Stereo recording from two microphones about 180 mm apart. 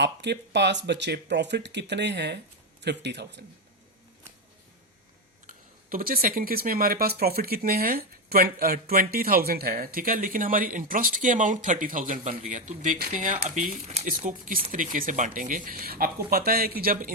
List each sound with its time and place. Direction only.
0.0 s speech: 70° right (ahead or behind)
5.5 s speech: 50° right (ahead or behind)